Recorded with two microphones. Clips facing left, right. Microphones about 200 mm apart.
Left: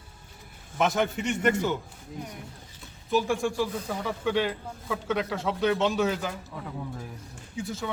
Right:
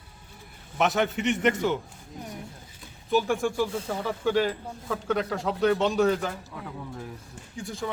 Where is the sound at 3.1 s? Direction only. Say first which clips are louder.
Right 1 dB; centre (ahead or behind).